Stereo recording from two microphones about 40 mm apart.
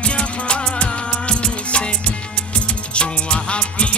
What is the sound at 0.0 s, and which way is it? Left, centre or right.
Music, left.